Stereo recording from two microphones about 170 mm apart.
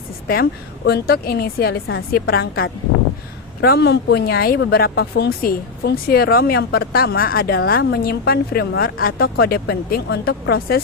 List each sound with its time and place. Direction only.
0.9 s speech: 65° left (ahead or behind)